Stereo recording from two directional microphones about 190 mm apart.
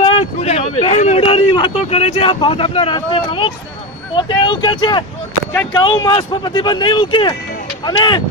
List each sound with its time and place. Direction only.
0.0 s speech: 30° left (ahead or behind)